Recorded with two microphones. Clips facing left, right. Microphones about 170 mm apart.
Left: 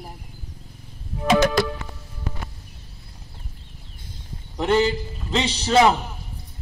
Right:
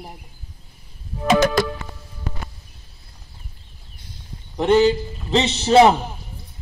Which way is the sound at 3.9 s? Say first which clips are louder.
Even; 50° left (ahead or behind).